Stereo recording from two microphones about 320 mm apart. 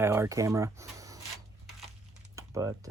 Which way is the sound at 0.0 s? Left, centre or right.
Centre.